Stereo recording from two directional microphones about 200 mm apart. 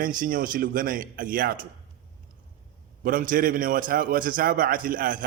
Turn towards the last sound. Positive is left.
turn(degrees=-45)  # may be behind; listen again after turning